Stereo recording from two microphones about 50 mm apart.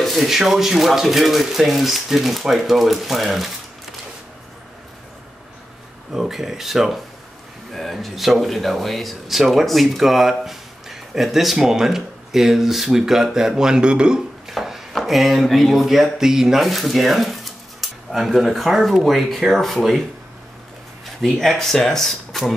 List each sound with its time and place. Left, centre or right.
0.0 s speech: centre
6.1 s speech: centre
14.5 s a sound: centre
15.0 s speech: centre
21.2 s speech: centre